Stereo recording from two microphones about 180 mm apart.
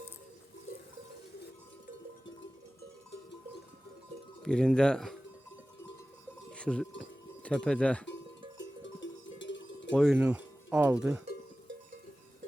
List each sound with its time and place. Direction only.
4.4 s speech: 5° left (ahead or behind)
6.5 s cowbell: 5° left (ahead or behind)
7.0 s speech: 5° left (ahead or behind)
8.5 s cowbell: 90° left
9.9 s speech: centre (ahead or behind)
10.2 s speech: 10° right (ahead or behind)